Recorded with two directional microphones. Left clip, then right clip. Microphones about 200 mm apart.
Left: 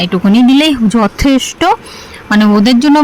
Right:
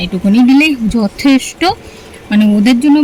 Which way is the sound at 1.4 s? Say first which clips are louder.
Left 4 dB; 90° left.